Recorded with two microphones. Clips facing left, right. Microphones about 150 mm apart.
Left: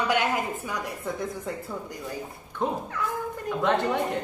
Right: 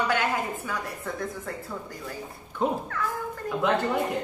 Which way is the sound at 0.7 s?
20° left (ahead or behind).